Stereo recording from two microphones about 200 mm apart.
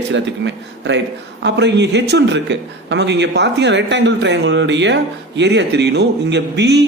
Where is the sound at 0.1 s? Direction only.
65° right (ahead or behind).